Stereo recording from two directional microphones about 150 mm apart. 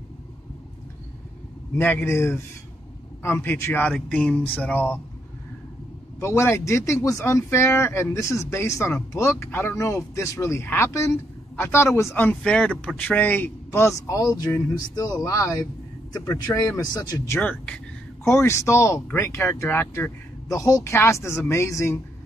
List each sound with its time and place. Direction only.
1.8 s speech: 15° left (ahead or behind)
6.1 s speech: 20° left (ahead or behind)
17.4 s speech: 10° left (ahead or behind)